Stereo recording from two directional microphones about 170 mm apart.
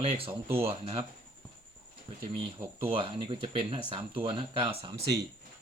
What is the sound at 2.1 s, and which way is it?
Speech, 30° right (ahead or behind).